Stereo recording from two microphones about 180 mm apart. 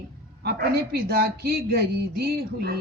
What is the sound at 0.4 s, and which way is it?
A woman's voice, 60° right (ahead or behind).